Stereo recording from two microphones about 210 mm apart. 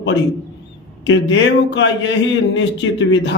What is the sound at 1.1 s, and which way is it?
A man's voice, 60° left (ahead or behind).